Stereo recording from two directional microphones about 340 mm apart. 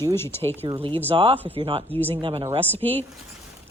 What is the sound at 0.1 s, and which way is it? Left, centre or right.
Speech, centre.